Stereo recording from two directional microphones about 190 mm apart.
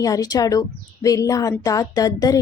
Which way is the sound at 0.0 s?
20° left (ahead or behind).